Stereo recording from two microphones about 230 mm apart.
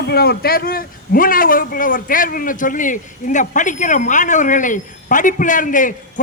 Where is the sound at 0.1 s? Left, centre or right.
Left.